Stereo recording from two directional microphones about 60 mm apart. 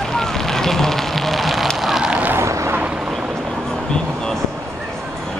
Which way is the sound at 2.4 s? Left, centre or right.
Right.